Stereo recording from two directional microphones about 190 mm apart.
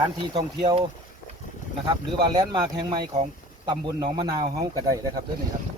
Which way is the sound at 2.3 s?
25° right (ahead or behind).